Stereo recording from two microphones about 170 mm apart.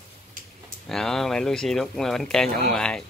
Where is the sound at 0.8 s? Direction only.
Centre (ahead or behind).